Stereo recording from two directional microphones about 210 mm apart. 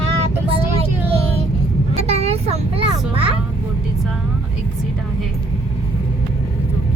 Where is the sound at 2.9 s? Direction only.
25° right (ahead or behind).